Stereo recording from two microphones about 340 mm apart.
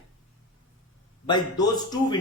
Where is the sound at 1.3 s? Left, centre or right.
Centre.